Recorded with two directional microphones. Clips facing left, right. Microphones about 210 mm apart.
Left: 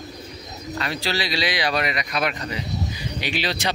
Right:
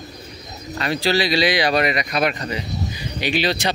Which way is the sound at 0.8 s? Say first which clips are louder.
Right 7 dB; 45° right (ahead or behind).